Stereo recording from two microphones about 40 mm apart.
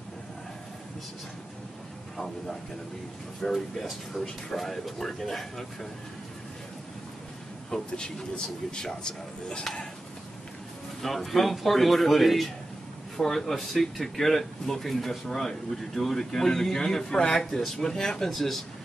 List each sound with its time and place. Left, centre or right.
2.1 s speech: centre
7.9 s a man's voice: centre
11.0 s speech: centre